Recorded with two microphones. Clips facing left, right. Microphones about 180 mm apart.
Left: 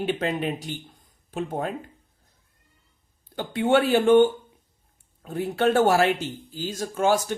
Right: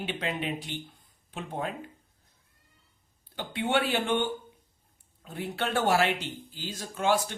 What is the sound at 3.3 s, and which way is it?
Speech, 45° left (ahead or behind).